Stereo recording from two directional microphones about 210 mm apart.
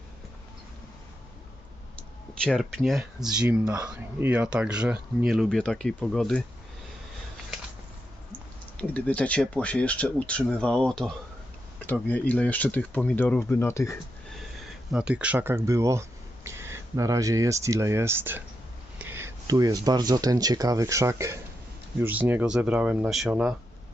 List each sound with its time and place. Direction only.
2.4 s speech: 5° left (ahead or behind)
8.8 s speech: 5° left (ahead or behind)
14.3 s speech: centre (ahead or behind)